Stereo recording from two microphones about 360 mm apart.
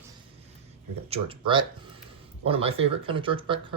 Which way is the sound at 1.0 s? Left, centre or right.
Centre.